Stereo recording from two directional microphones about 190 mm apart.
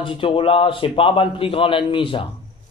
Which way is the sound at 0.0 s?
25° left (ahead or behind).